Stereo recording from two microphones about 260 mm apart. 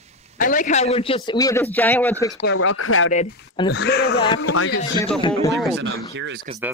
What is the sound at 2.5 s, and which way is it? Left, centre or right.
Speech, left.